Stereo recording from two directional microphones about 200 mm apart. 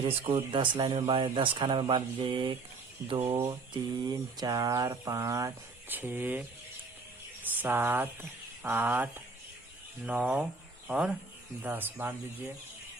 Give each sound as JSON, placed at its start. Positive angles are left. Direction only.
{"t": 0.0, "sound": "speech", "side_deg": -30}
{"t": 3.3, "sound": "mantra", "side_deg": -15}
{"t": 7.6, "sound": "mantra", "side_deg": -10}
{"t": 10.1, "sound": "speech", "side_deg": -5}
{"t": 11.6, "sound": "mantra", "side_deg": -10}